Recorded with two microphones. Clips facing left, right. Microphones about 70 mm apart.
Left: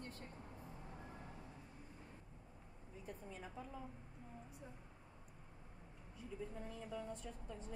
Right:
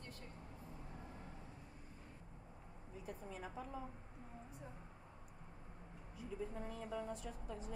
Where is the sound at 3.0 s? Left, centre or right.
Centre.